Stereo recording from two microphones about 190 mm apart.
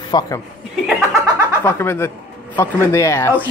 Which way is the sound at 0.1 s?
20° left (ahead or behind).